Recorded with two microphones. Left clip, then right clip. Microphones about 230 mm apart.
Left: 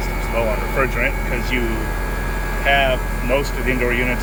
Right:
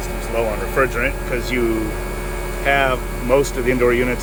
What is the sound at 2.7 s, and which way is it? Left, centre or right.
Speech, centre.